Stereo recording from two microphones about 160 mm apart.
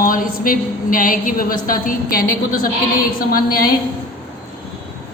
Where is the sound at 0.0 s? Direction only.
60° left (ahead or behind).